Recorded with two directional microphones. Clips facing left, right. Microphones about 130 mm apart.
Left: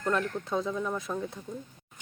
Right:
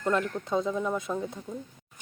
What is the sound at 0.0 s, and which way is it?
Speech, 10° right (ahead or behind).